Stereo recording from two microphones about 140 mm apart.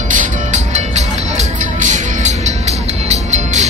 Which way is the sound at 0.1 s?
60° right (ahead or behind).